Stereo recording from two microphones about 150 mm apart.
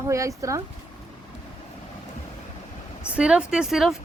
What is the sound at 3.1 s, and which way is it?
Speech, 5° right (ahead or behind).